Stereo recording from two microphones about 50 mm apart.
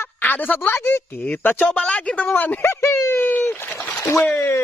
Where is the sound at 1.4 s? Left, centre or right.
Left.